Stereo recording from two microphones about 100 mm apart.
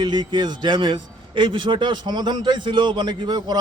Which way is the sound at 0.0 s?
50° right (ahead or behind).